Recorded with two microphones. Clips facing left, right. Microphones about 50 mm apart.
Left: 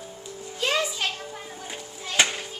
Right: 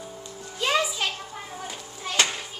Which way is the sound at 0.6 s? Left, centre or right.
Centre.